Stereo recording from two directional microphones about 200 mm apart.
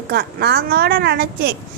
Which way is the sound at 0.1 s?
55° right (ahead or behind).